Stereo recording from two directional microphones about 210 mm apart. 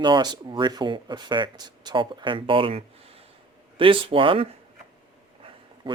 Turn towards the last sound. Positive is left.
turn(degrees=-20)  # may be behind; listen again after turning